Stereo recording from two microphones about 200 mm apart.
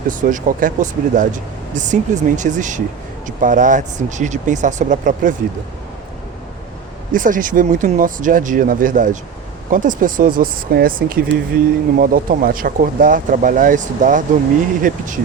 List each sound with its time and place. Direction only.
0.1 s speech: 40° right (ahead or behind)
7.1 s speech: 40° right (ahead or behind)